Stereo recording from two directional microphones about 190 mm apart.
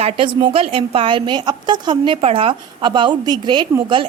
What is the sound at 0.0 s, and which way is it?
A woman's voice, 30° right (ahead or behind).